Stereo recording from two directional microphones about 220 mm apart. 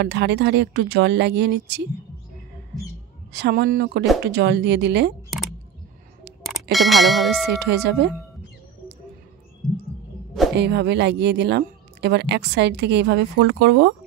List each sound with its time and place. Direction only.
0.0 s speech: 50° right (ahead or behind)
3.3 s speech: 45° right (ahead or behind)
6.4 s speech: centre (ahead or behind)
7.5 s speech: 50° right (ahead or behind)
10.5 s speech: 50° right (ahead or behind)